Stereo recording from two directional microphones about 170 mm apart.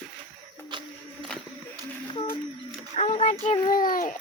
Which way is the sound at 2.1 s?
30° left (ahead or behind).